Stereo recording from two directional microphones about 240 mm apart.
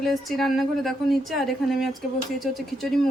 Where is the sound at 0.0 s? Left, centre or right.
Centre.